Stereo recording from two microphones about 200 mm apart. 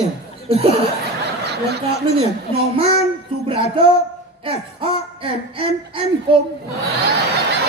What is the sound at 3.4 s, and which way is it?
Speech, 25° right (ahead or behind).